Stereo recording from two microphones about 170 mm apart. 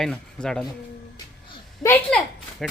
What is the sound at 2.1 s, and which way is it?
Speech, 5° left (ahead or behind).